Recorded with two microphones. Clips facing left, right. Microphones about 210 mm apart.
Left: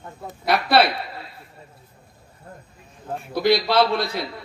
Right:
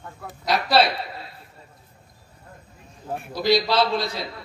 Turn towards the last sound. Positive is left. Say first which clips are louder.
# left 3 dB
turn(degrees=55)  # may be behind; listen again after turning